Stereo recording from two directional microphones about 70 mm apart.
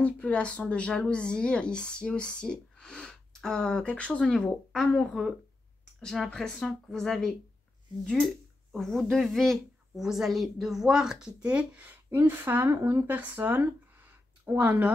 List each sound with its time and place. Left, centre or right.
0.0 s a woman's voice: centre
8.7 s a woman's voice: centre; by 12.7 s right
12.7 s speech: right
13.0 s speech: right